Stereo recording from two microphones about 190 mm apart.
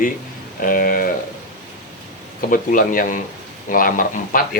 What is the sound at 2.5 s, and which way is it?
Speech, 45° left (ahead or behind).